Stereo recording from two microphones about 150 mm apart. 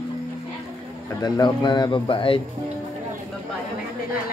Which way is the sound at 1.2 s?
25° left (ahead or behind).